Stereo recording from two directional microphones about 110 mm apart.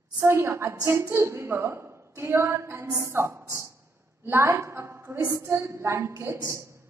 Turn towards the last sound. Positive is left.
turn(degrees=-25)  # may be behind; listen again after turning